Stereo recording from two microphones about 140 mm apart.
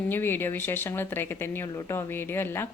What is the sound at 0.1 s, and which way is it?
A woman's voice, 15° left (ahead or behind).